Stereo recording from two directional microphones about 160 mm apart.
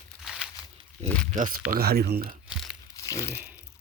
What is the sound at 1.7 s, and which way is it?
Speech, 75° right (ahead or behind).